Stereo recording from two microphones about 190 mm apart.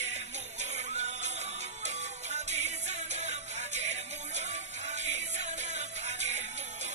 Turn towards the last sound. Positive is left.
turn(degrees=-35)  # may be behind; listen again after turning